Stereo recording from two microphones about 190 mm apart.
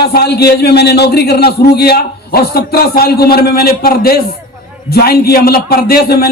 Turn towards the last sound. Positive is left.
turn(degrees=55)  # may be behind; listen again after turning